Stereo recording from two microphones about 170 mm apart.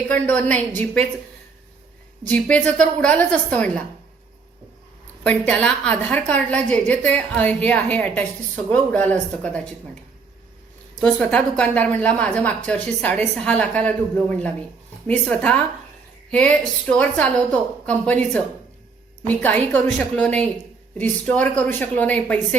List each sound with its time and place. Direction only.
0.1 s a woman's voice: 10° left (ahead or behind)
2.7 s a woman's voice: 5° left (ahead or behind)
5.2 s a woman's voice: 5° left (ahead or behind)
11.0 s a woman's voice: 5° left (ahead or behind)